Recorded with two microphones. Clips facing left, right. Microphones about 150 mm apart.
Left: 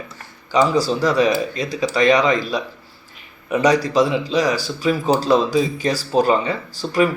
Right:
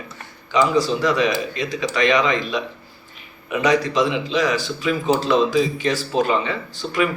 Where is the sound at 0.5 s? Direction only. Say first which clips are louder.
Left 1 dB; 35° left (ahead or behind).